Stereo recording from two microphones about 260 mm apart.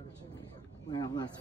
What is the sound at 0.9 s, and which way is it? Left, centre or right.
Speech, centre.